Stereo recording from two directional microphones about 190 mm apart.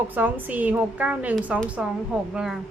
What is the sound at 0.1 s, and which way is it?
A woman's voice, 10° right (ahead or behind).